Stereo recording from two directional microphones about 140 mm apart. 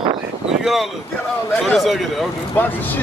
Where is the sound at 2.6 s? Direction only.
15° left (ahead or behind).